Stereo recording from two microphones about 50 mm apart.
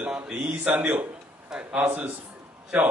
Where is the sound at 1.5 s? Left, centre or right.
Right.